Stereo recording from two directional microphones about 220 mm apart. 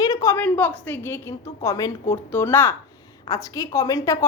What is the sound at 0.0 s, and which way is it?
A woman's voice, 15° left (ahead or behind).